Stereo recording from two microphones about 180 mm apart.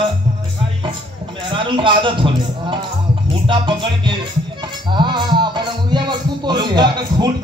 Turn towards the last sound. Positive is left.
turn(degrees=-25)  # may be behind; listen again after turning